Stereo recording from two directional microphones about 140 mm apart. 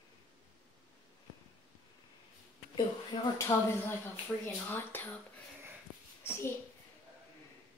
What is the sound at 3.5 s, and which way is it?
Speech, 20° left (ahead or behind).